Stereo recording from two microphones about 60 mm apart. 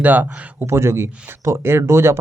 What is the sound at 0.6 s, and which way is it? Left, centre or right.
Speech, right.